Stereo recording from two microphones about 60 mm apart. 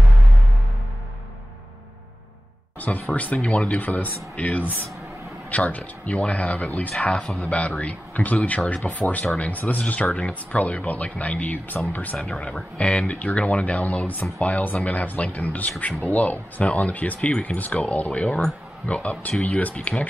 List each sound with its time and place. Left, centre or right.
2.8 s speech: left
12.2 s speech: centre